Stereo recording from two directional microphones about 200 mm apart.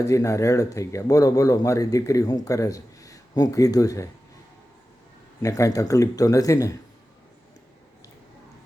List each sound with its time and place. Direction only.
0.0 s speech: 15° left (ahead or behind)
5.4 s speech: 15° left (ahead or behind)